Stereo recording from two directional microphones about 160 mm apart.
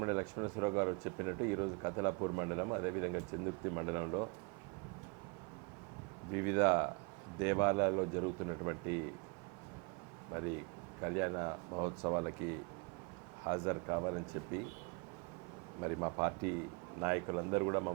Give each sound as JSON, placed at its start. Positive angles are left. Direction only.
{"t": 0.0, "sound": "speech", "side_deg": -20}
{"t": 6.3, "sound": "speech", "side_deg": -20}
{"t": 11.0, "sound": "speech", "side_deg": -20}
{"t": 15.8, "sound": "speech", "side_deg": -20}